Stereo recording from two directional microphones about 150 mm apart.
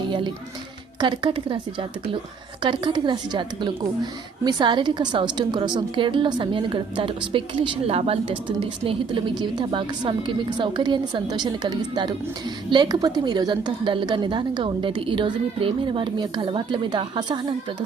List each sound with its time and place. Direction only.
0.1 s music: 30° right (ahead or behind)
0.9 s a woman's voice: 30° right (ahead or behind)
2.6 s a woman's voice: 30° right (ahead or behind)